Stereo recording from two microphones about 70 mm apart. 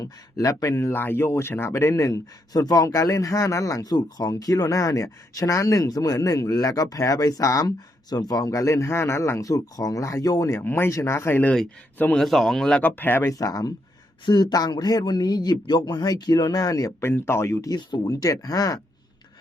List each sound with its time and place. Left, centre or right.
0.0 s speech: left
3.9 s a man's voice: left
8.4 s speech: left
10.5 s speech: left
10.9 s speech: left
12.1 s speech: centre
12.8 s speech: left
13.3 s speech: left
14.3 s a man's voice: left
17.0 s speech: left
17.7 s speech: left
18.1 s speech: left